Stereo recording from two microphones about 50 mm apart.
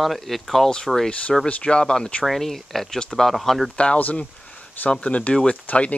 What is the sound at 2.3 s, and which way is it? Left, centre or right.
Speech, centre.